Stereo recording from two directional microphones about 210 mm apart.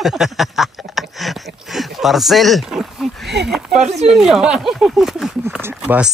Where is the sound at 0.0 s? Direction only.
Centre (ahead or behind).